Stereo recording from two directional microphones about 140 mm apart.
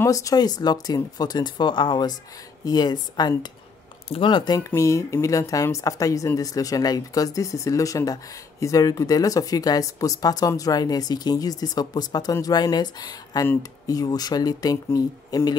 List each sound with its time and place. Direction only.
0.0 s speech: 25° left (ahead or behind)
4.6 s speech: 20° left (ahead or behind)